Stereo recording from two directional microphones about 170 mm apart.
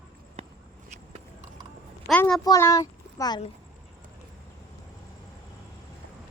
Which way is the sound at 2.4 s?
20° left (ahead or behind).